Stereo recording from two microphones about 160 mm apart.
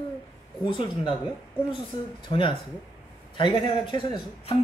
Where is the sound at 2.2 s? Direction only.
30° left (ahead or behind).